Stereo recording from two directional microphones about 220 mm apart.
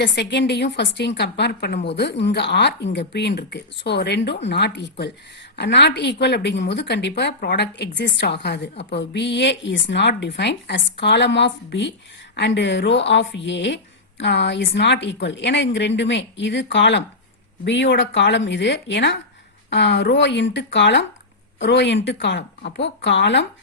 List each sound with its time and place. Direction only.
0.0 s a woman's voice: 50° left (ahead or behind)